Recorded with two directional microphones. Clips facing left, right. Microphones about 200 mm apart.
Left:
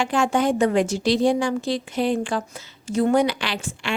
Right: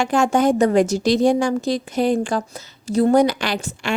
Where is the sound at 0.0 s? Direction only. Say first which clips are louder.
Right 4 dB; 45° right (ahead or behind).